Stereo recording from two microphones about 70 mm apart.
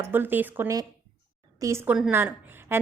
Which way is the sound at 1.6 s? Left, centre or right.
Right.